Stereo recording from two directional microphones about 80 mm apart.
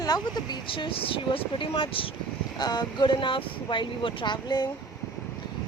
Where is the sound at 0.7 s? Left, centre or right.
Left.